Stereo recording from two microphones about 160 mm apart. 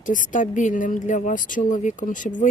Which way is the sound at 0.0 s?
55° left (ahead or behind).